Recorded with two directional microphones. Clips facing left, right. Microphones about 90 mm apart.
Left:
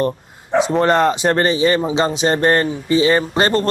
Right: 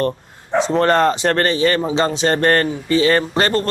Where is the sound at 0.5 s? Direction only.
10° left (ahead or behind).